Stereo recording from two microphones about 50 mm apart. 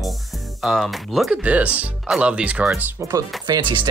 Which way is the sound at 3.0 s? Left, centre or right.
Right.